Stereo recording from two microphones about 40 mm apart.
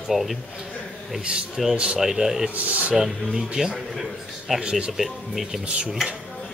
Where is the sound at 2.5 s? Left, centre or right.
Right.